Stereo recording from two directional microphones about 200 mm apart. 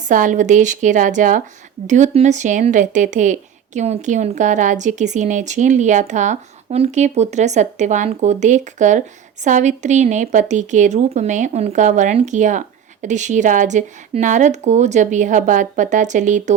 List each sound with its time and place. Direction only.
0.1 s a woman's voice: 40° right (ahead or behind)